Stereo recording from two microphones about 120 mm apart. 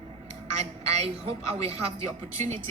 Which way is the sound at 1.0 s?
60° right (ahead or behind).